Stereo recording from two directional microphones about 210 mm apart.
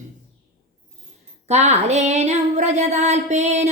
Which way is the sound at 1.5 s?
30° right (ahead or behind).